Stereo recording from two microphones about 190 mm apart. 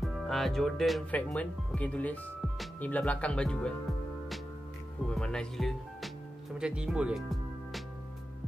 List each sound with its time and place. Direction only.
0.0 s speech: centre (ahead or behind)
5.1 s speech: 5° left (ahead or behind)